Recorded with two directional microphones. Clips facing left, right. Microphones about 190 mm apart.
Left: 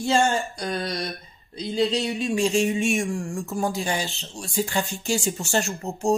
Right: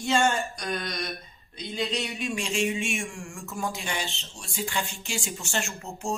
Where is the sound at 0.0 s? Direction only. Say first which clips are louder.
Left 3 dB; 35° left (ahead or behind).